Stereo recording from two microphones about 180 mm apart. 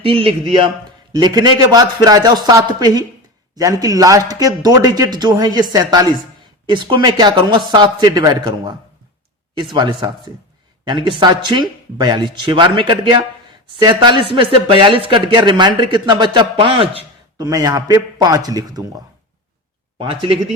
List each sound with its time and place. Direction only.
0.0 s speech: 30° right (ahead or behind)
9.7 s speech: 25° right (ahead or behind)
17.4 s speech: 20° right (ahead or behind)